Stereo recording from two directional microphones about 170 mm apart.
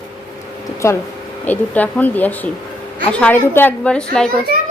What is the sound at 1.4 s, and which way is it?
A woman's voice, 10° left (ahead or behind).